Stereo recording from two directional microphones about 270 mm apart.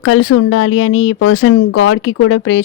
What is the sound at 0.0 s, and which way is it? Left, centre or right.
Speech, left.